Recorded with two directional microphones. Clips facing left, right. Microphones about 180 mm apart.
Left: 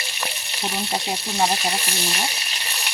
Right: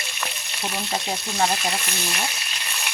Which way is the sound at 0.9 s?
30° left (ahead or behind).